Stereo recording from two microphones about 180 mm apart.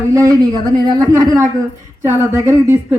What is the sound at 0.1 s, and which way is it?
Speech, 15° right (ahead or behind).